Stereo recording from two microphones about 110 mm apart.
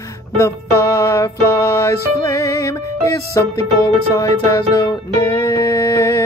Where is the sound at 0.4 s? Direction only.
30° left (ahead or behind).